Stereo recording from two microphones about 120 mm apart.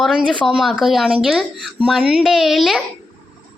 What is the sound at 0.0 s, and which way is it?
A woman's voice, 5° left (ahead or behind).